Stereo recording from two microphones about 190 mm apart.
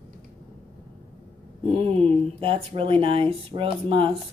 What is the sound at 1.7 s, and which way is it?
Speech, 30° right (ahead or behind).